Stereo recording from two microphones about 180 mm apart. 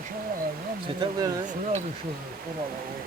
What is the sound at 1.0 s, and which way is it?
Speech, 20° right (ahead or behind).